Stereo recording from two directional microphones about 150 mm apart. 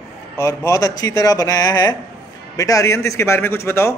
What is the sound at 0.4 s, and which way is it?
A man's voice, 20° left (ahead or behind).